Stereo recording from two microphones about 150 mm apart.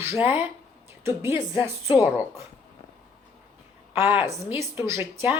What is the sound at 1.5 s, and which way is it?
Speech, 15° right (ahead or behind).